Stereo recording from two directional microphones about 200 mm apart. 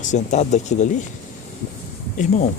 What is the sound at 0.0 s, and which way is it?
Speech, 35° left (ahead or behind).